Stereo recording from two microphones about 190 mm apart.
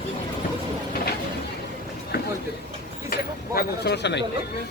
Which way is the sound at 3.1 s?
60° left (ahead or behind).